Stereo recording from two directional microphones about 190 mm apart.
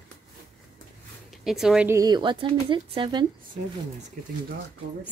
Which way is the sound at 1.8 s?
20° right (ahead or behind).